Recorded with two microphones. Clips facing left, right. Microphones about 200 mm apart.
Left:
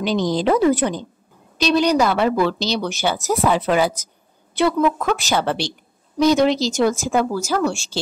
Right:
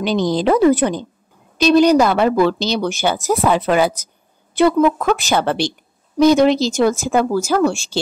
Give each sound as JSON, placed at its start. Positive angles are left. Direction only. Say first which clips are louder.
{"t": 0.0, "sound": "speech", "louder": "right 2 dB", "side_deg": -60}
{"t": 4.6, "sound": "speech", "louder": "right 4 dB", "side_deg": -50}